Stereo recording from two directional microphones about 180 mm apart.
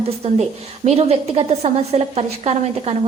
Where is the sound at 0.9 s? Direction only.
35° right (ahead or behind).